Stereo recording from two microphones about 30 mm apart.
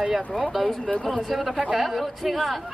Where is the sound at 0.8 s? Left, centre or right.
Left.